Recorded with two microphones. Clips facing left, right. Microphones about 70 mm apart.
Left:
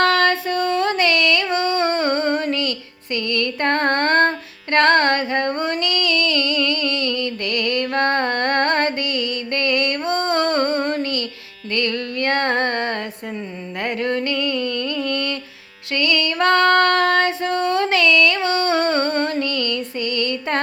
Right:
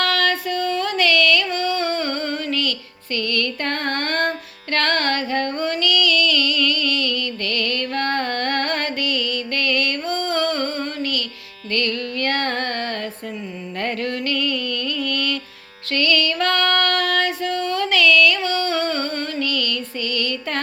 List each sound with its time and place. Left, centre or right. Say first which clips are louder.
0.0 s music: left 4 dB; left
13.8 s music: left 1 dB; centre
14.1 s music: left 2 dB; left
17.8 s music: right 3 dB; left